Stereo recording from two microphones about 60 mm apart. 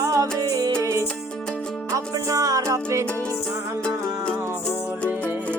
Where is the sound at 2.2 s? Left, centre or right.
Right.